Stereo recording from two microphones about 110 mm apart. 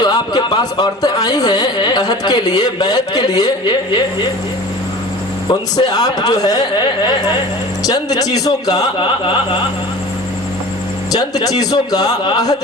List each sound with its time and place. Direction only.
0.0 s speech: 40° left (ahead or behind)
5.5 s speech: 35° left (ahead or behind)
11.1 s speech: 35° left (ahead or behind)